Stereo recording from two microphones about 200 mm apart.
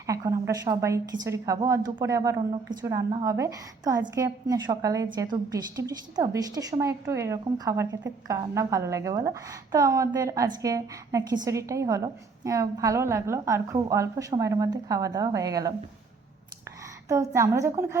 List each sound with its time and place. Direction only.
0.1 s a woman's voice: 15° right (ahead or behind)
17.1 s a woman's voice: 15° right (ahead or behind)